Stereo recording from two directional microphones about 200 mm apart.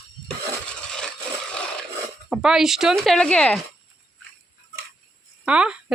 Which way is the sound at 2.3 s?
5° right (ahead or behind).